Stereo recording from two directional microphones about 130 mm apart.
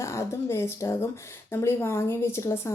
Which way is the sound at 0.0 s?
20° left (ahead or behind).